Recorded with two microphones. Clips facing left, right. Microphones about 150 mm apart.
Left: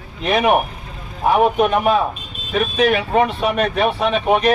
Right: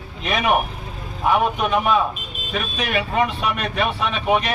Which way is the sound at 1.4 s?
55° left (ahead or behind).